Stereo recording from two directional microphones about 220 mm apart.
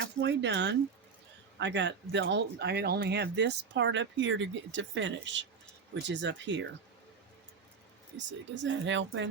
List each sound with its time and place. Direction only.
0.0 s speech: 55° right (ahead or behind)
8.2 s speech: 55° right (ahead or behind)